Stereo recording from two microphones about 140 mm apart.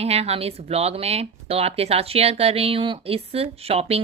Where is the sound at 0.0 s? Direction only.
45° right (ahead or behind).